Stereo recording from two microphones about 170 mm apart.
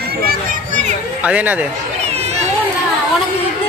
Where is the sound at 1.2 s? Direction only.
10° right (ahead or behind).